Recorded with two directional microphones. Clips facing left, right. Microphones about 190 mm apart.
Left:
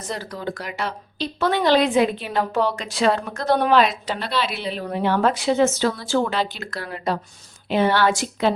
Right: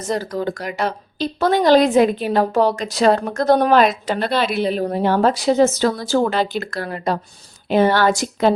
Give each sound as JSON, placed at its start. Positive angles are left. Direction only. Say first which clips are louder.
{"t": 0.1, "sound": "a woman's voice", "louder": "right 7 dB", "side_deg": -40}